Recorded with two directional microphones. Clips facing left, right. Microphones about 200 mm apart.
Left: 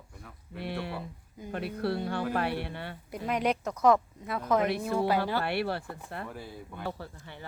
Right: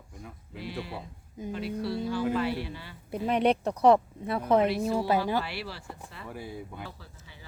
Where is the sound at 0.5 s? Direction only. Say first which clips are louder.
Left 2 dB; 60° left (ahead or behind).